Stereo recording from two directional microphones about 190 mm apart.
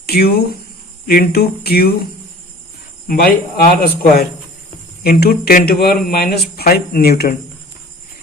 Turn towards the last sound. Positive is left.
turn(degrees=55)  # may be behind; listen again after turning